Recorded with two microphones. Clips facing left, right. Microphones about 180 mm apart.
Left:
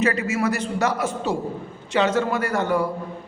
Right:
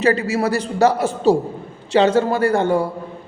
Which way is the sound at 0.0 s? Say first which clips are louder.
Right 4 dB; 30° right (ahead or behind).